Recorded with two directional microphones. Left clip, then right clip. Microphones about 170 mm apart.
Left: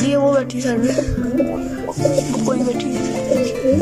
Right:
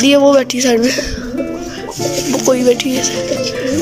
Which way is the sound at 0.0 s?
10° right (ahead or behind).